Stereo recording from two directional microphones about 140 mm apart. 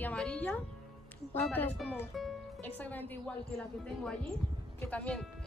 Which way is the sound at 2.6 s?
10° left (ahead or behind).